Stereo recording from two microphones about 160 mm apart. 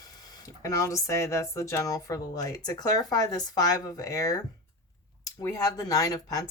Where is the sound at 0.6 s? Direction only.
20° left (ahead or behind).